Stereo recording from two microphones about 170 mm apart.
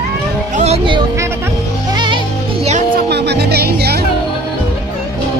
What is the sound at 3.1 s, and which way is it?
Music, 80° right.